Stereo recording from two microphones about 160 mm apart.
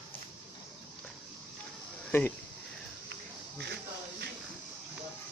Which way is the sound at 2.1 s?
15° left (ahead or behind).